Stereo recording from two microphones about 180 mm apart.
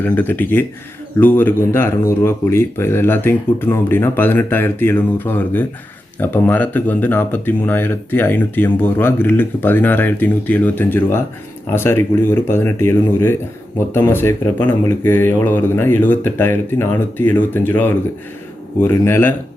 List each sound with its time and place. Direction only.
0.0 s speech: 10° left (ahead or behind)